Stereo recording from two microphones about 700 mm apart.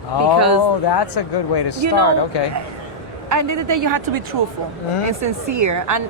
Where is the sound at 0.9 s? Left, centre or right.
Left.